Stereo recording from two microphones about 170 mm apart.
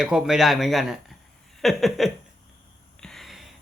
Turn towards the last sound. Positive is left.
turn(degrees=0)  # may be behind; listen again after turning